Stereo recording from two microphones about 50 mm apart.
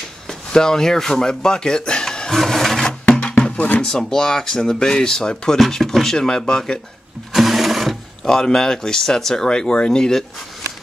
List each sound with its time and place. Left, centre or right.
0.3 s speech: centre
3.3 s music: left
3.8 s speech: centre
7.3 s sewing machine: centre
8.3 s speech: centre